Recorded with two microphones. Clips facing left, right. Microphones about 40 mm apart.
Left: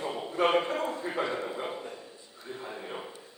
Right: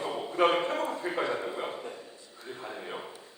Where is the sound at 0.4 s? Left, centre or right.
Centre.